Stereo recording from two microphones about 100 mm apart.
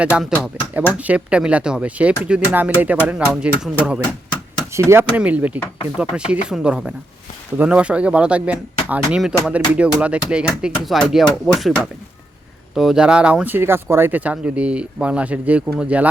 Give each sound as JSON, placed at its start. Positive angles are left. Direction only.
{"t": 0.0, "sound": "speech", "side_deg": -10}
{"t": 4.7, "sound": "speech", "side_deg": -25}
{"t": 5.1, "sound": "speech", "side_deg": -15}